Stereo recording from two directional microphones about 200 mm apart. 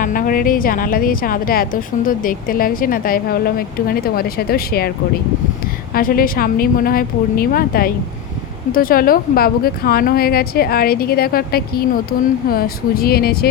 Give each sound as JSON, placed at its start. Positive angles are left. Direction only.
{"t": 0.0, "sound": "a woman's voice", "side_deg": 45}
{"t": 5.9, "sound": "a woman's voice", "side_deg": 45}